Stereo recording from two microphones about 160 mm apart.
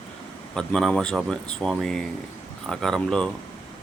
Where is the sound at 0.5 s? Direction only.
5° left (ahead or behind).